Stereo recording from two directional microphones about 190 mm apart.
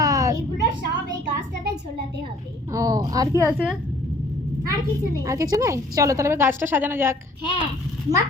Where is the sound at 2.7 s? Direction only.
20° right (ahead or behind).